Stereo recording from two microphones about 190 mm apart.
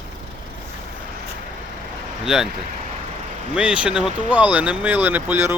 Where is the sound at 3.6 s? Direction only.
5° right (ahead or behind).